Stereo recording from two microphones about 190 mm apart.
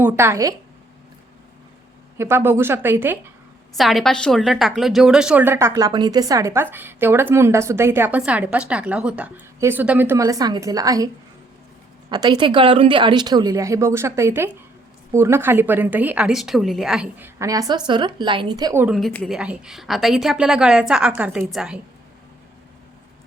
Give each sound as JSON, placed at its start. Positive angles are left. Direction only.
{"t": 0.0, "sound": "a woman's voice", "side_deg": -15}
{"t": 2.1, "sound": "a woman's voice", "side_deg": -15}
{"t": 3.8, "sound": "a woman's voice", "side_deg": 0}
{"t": 18.9, "sound": "a woman's voice", "side_deg": 0}